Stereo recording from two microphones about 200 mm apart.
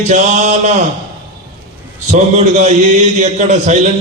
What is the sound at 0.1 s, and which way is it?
Speech, 35° right (ahead or behind).